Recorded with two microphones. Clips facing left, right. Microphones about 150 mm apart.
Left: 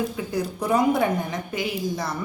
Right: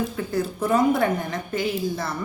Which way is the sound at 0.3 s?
15° left (ahead or behind).